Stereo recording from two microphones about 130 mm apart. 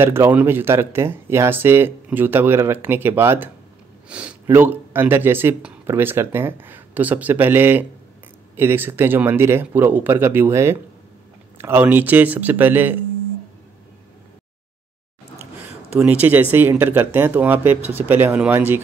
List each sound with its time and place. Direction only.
0.0 s speech: 20° right (ahead or behind)
16.0 s speech: 10° right (ahead or behind)